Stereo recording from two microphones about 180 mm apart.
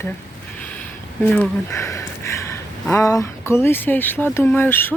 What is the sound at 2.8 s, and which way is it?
Speech, 15° left (ahead or behind).